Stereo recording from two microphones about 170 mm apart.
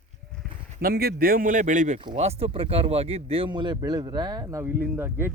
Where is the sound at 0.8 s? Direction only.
65° right (ahead or behind); by 5.3 s 15° right (ahead or behind).